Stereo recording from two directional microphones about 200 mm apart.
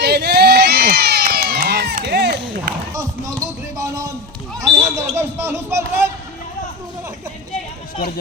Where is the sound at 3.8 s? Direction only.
15° right (ahead or behind).